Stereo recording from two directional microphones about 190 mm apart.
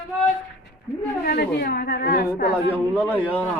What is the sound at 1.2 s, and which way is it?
Speech, 55° left (ahead or behind).